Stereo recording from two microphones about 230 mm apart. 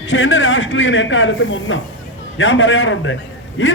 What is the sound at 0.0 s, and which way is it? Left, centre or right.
A man's voice, left.